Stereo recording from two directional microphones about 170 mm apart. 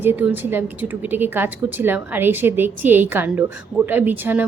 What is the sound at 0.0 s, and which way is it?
Speech, 10° right (ahead or behind).